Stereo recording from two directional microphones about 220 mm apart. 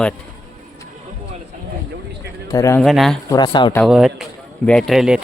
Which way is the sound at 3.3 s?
20° left (ahead or behind).